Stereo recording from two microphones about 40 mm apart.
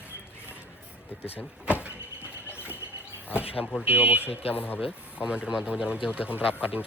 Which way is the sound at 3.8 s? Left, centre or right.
Right.